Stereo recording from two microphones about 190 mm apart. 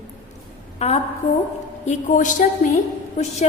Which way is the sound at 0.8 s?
35° left (ahead or behind).